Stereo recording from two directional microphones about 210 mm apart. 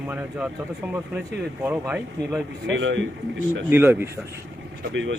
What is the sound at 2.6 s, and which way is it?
Speech, 60° right (ahead or behind).